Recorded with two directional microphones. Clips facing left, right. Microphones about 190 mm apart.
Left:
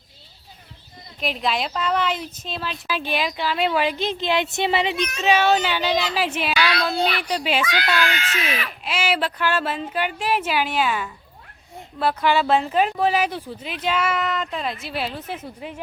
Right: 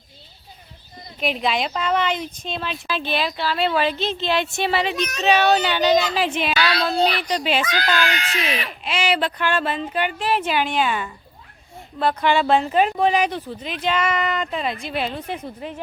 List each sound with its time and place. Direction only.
1.2 s a woman's voice: centre (ahead or behind)
5.9 s a woman's voice: 45° right (ahead or behind)
6.1 s a woman's voice: 5° left (ahead or behind)
7.6 s a child's voice: 40° right (ahead or behind)
8.8 s speech: 5° left (ahead or behind)